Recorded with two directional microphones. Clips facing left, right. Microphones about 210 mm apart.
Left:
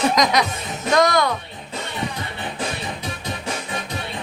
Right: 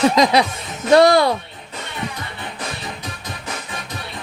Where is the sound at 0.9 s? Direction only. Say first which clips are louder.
Right 6 dB; 30° right (ahead or behind).